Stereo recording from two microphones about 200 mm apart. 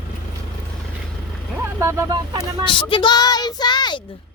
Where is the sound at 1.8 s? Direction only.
15° right (ahead or behind).